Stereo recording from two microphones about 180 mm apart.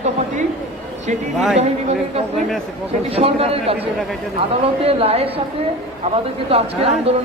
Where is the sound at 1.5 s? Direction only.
35° right (ahead or behind).